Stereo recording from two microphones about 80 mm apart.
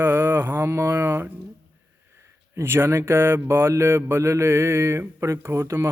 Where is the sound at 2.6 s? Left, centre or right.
Right.